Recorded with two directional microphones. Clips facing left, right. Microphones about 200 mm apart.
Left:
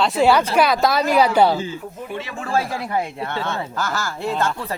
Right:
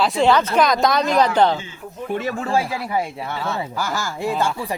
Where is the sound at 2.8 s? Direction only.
5° right (ahead or behind).